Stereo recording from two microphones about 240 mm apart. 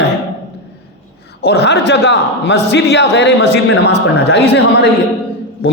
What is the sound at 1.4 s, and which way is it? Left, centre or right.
A man's voice, left.